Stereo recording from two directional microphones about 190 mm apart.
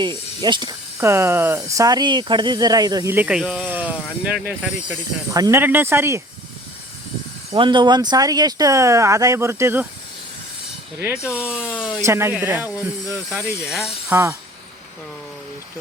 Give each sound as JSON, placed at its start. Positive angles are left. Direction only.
{"t": 0.0, "sound": "speech", "side_deg": -25}
{"t": 7.5, "sound": "speech", "side_deg": -25}
{"t": 11.0, "sound": "speech", "side_deg": -10}
{"t": 12.0, "sound": "speech", "side_deg": -15}
{"t": 14.1, "sound": "speech", "side_deg": -15}